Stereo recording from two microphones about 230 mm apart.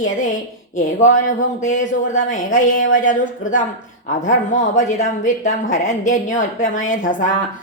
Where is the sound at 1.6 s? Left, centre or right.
Left.